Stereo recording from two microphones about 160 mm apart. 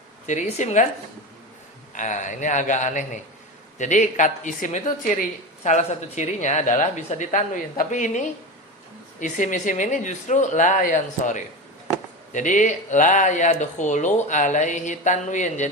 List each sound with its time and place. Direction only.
0.3 s speech: 50° left (ahead or behind)
1.9 s speech: 50° left (ahead or behind)
9.2 s speech: 55° left (ahead or behind)